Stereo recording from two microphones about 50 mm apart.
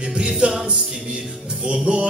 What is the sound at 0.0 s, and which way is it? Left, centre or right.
A capella, right.